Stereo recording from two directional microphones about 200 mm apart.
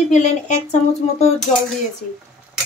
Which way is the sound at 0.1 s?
35° left (ahead or behind).